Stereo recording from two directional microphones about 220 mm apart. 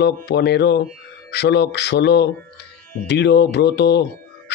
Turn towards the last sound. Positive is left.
turn(degrees=50)  # may be behind; listen again after turning